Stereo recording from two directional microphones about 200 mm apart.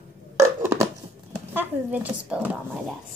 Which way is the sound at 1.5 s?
10° right (ahead or behind).